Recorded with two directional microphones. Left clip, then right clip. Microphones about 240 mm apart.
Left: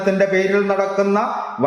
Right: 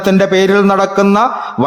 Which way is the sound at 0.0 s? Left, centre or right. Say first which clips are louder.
Right 6 dB; right.